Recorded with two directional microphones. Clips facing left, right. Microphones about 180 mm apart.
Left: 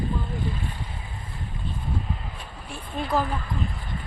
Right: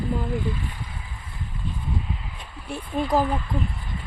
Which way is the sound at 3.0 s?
40° right (ahead or behind).